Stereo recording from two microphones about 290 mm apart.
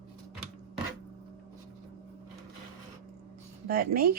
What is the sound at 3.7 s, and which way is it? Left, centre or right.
Speech, right.